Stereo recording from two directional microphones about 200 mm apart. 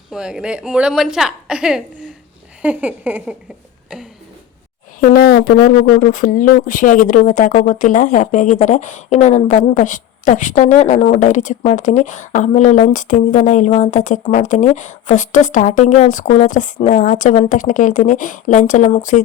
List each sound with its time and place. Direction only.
0.1 s a woman's voice: 5° right (ahead or behind)
2.6 s a sound: 5° right (ahead or behind)
4.9 s a woman's voice: 50° left (ahead or behind)